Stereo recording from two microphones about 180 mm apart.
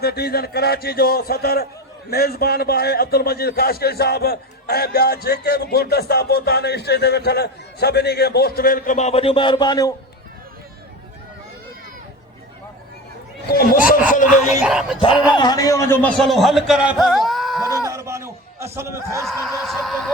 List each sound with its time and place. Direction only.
0.0 s a man's voice: 60° left (ahead or behind); by 9.9 s 20° left (ahead or behind)
13.5 s speech: 55° left (ahead or behind)
14.6 s a man's voice: 5° right (ahead or behind)
15.4 s a man's voice: 20° left (ahead or behind); by 17.7 s centre (ahead or behind)
17.7 s a sound: 20° right (ahead or behind)
19.2 s speech: centre (ahead or behind)